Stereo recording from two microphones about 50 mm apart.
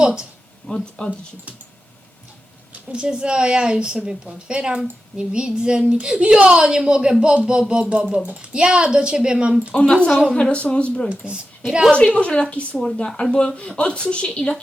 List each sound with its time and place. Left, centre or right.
0.0 s speech: centre
0.7 s speech: centre
2.9 s a woman's voice: centre
9.7 s a woman's voice: left
10.1 s a woman's voice: centre
10.3 s a woman's voice: left
12.8 s a woman's voice: centre